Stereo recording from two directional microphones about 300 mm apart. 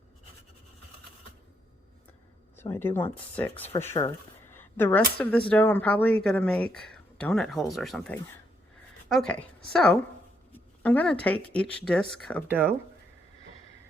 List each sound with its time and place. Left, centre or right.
2.6 s speech: centre